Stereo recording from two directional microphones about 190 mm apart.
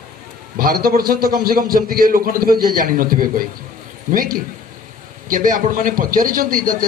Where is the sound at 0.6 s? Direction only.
50° right (ahead or behind).